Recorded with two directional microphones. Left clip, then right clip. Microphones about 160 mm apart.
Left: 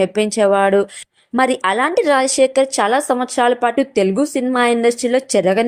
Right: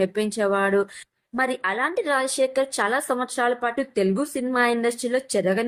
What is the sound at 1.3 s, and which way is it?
A woman's voice, 45° left (ahead or behind).